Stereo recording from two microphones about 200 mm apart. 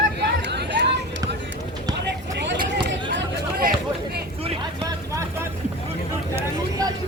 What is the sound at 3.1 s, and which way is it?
Chatter, 60° right (ahead or behind).